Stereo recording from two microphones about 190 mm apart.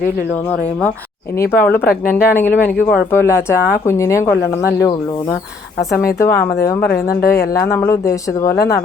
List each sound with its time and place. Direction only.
1.5 s speech: 10° left (ahead or behind)
6.1 s speech: 15° left (ahead or behind)
6.8 s speech: 50° left (ahead or behind)
7.3 s speech: 15° left (ahead or behind)